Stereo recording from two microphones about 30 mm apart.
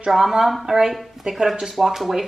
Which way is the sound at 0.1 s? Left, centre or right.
Centre.